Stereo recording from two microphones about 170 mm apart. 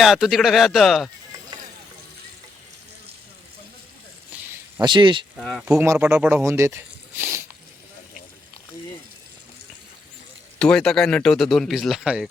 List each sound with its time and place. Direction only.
0.0 s a man's voice: centre (ahead or behind)
4.8 s speech: 30° right (ahead or behind)
5.4 s a man's voice: 5° left (ahead or behind)
5.6 s speech: 10° right (ahead or behind)
10.6 s a man's voice: 5° left (ahead or behind)